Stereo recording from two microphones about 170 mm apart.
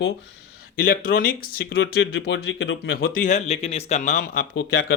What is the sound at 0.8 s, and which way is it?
Speech, 60° left (ahead or behind).